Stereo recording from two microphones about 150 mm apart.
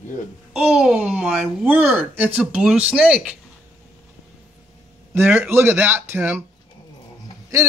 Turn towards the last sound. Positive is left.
turn(degrees=-20)  # may be behind; listen again after turning